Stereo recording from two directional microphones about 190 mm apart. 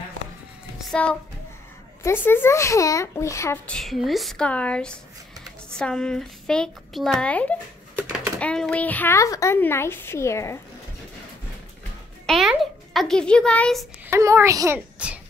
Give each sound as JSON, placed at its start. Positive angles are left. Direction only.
{"t": 0.7, "sound": "a sound", "side_deg": 5}
{"t": 2.0, "sound": "a child's voice", "side_deg": 10}
{"t": 3.7, "sound": "a child's voice", "side_deg": 0}
{"t": 12.3, "sound": "a child's voice", "side_deg": 0}
{"t": 14.0, "sound": "speech", "side_deg": -15}